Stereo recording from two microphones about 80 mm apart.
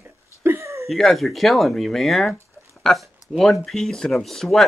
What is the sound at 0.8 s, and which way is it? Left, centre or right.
Speech, centre.